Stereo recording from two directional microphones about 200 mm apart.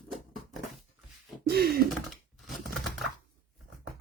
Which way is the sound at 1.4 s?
50° right (ahead or behind).